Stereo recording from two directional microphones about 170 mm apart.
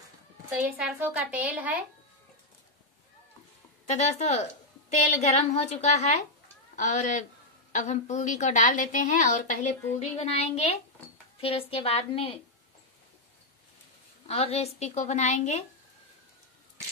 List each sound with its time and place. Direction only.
0.7 s a woman's voice: 5° right (ahead or behind)
3.8 s a woman's voice: 45° left (ahead or behind)
14.2 s a woman's voice: 35° left (ahead or behind)